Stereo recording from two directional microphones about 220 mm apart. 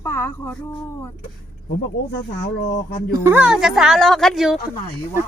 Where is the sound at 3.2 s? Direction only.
5° right (ahead or behind).